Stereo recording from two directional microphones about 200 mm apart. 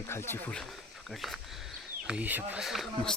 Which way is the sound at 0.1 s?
10° left (ahead or behind).